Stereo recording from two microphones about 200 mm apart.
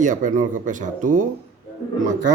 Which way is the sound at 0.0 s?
40° right (ahead or behind).